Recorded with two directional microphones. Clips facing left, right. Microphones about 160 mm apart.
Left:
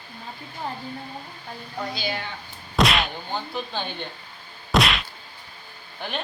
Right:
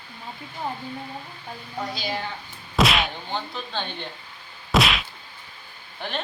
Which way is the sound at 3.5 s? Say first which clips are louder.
Left 1 dB; 10° left (ahead or behind).